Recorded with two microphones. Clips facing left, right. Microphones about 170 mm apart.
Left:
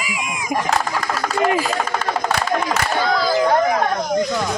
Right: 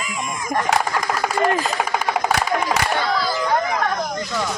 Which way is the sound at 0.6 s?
10° right (ahead or behind).